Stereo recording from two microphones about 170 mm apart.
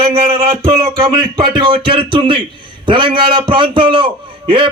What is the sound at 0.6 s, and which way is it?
A man's voice, 30° right (ahead or behind).